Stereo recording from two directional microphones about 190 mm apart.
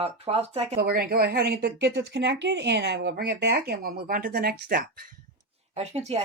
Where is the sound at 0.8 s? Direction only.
55° right (ahead or behind).